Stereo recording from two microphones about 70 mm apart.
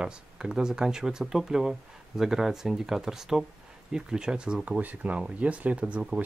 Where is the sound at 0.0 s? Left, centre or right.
Centre.